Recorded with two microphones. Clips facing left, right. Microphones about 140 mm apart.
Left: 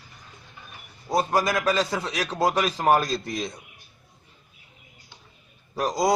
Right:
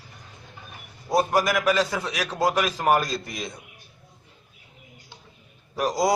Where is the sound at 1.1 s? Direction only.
25° left (ahead or behind).